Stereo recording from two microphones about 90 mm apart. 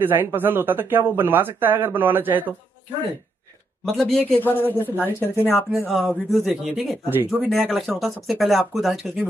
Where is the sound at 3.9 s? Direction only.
5° left (ahead or behind).